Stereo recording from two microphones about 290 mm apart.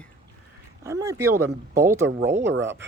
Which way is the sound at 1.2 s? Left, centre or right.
Right.